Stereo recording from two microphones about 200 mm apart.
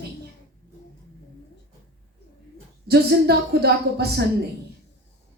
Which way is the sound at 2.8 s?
55° right (ahead or behind).